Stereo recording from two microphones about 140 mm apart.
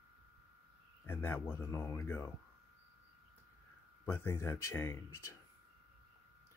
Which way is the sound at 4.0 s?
15° left (ahead or behind).